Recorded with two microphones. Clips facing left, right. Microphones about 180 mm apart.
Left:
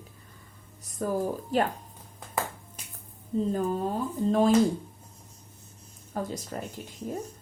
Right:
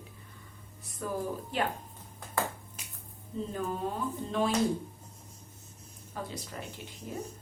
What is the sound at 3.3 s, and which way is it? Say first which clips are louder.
Speech: left 9 dB; 40° left (ahead or behind).